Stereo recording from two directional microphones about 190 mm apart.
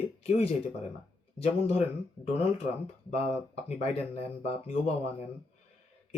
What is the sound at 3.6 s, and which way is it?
Speech, 30° left (ahead or behind).